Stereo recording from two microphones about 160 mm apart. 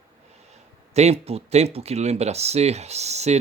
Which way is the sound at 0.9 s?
40° right (ahead or behind).